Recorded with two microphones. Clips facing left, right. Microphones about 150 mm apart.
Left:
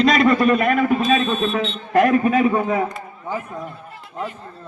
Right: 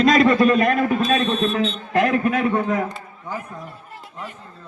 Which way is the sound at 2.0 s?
10° left (ahead or behind).